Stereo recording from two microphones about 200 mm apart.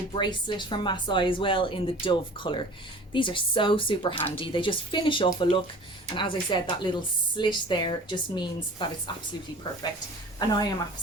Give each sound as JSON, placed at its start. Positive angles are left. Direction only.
{"t": 0.1, "sound": "a woman's voice", "side_deg": 25}
{"t": 10.5, "sound": "a woman's voice", "side_deg": 20}